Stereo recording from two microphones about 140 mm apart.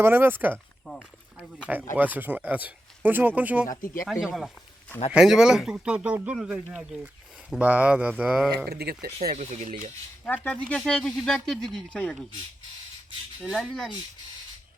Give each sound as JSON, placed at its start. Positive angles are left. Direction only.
{"t": 0.0, "sound": "speech", "side_deg": -15}
{"t": 0.5, "sound": "a sound", "side_deg": 5}
{"t": 1.4, "sound": "speech", "side_deg": -10}
{"t": 3.7, "sound": "speech", "side_deg": 75}
{"t": 4.0, "sound": "speech", "side_deg": -5}
{"t": 8.8, "sound": "speech", "side_deg": -90}
{"t": 9.2, "sound": "speech", "side_deg": -55}
{"t": 10.2, "sound": "speech", "side_deg": 10}
{"t": 13.6, "sound": "speech", "side_deg": 5}